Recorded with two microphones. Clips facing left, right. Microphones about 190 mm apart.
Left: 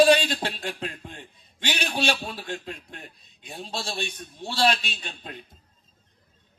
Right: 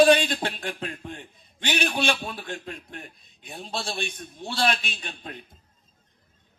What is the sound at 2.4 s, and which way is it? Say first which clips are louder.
A man's voice: left 1 dB; 55° right (ahead or behind).